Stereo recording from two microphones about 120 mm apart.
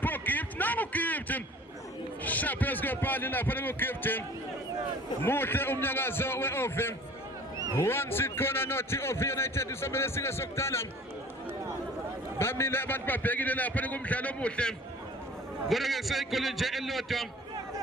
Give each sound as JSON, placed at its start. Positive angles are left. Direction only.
{"t": 0.0, "sound": "a man's voice", "side_deg": 15}
{"t": 5.2, "sound": "a man's voice", "side_deg": 20}
{"t": 12.4, "sound": "a man's voice", "side_deg": 20}